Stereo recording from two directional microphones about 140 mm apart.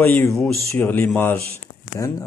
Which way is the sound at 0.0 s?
15° left (ahead or behind).